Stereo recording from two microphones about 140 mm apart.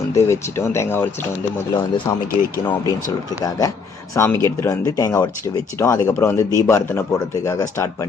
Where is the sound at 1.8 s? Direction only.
35° left (ahead or behind).